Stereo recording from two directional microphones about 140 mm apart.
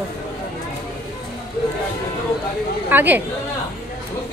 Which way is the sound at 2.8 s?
15° right (ahead or behind).